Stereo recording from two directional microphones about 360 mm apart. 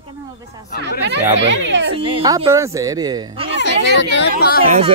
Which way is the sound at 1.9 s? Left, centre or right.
Centre.